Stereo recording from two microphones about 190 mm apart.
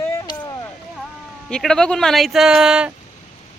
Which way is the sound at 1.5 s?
5° left (ahead or behind).